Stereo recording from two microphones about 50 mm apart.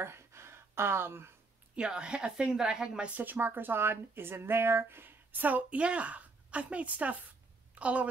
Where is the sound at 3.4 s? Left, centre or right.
Right.